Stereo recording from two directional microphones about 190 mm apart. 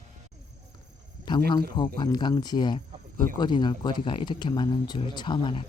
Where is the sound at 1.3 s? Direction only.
20° left (ahead or behind).